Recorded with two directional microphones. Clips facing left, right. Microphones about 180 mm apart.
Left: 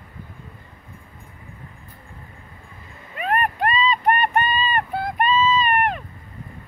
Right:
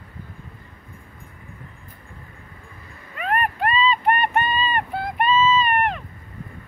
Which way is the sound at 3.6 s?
40° left (ahead or behind).